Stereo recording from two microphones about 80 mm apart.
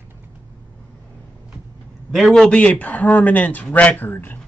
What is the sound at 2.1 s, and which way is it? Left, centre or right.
Speech, centre.